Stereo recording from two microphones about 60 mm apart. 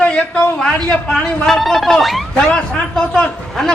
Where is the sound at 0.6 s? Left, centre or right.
Centre.